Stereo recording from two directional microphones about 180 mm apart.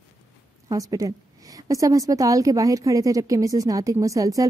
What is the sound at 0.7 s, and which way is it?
A woman's voice, 20° right (ahead or behind).